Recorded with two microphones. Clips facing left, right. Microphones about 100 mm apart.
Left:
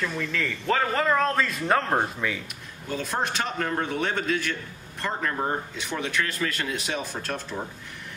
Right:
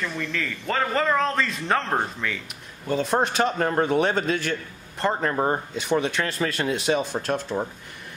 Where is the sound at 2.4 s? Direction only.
25° right (ahead or behind).